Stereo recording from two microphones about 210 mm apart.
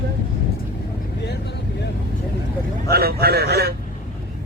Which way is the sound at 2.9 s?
50° right (ahead or behind).